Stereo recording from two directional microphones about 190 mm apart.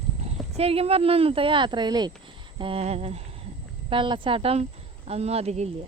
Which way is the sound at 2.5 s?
30° right (ahead or behind).